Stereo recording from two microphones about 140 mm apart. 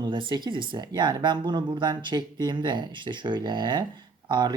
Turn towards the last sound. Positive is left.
turn(degrees=-30)  # may be behind; listen again after turning